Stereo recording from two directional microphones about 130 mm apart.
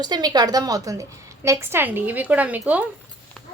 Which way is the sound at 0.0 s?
30° right (ahead or behind).